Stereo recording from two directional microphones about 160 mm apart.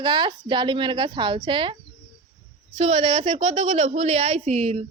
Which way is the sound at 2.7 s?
40° right (ahead or behind).